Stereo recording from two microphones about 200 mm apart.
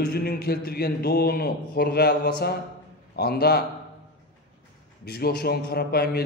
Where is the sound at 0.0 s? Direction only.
50° left (ahead or behind).